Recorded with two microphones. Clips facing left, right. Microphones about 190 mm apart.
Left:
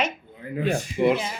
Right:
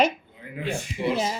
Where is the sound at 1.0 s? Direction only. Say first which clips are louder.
Left 6 dB; 55° left (ahead or behind).